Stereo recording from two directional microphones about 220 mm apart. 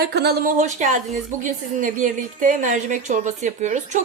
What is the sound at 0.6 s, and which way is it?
Speech, 35° right (ahead or behind).